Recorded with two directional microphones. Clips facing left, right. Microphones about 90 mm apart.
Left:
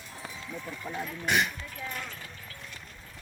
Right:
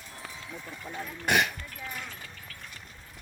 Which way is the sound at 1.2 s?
60° right (ahead or behind).